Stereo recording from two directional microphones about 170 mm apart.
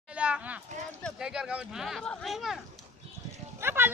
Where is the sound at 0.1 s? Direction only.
5° right (ahead or behind).